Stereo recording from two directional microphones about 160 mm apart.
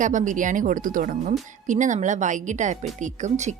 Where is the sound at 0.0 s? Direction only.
50° right (ahead or behind).